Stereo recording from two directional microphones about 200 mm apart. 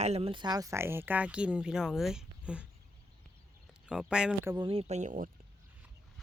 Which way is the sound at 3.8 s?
5° right (ahead or behind).